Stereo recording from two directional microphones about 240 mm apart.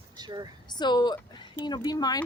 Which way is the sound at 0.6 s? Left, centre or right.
Centre.